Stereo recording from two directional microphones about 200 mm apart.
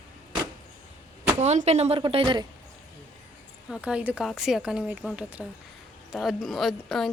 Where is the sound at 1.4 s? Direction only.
35° right (ahead or behind).